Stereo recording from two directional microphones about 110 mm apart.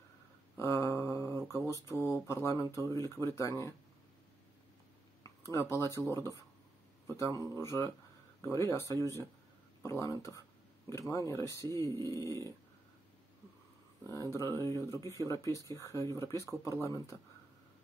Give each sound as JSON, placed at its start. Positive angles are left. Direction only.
{"t": 0.6, "sound": "a sound", "side_deg": 25}
{"t": 1.7, "sound": "speech", "side_deg": 25}
{"t": 5.2, "sound": "speech", "side_deg": 30}
{"t": 14.3, "sound": "speech", "side_deg": 25}